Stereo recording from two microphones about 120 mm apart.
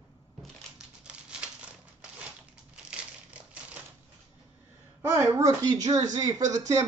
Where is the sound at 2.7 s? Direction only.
10° right (ahead or behind).